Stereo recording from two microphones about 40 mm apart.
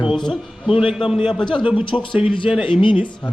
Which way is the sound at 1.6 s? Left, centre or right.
Right.